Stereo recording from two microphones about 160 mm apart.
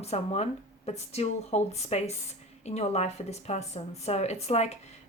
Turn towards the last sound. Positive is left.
turn(degrees=45)  # may be behind; listen again after turning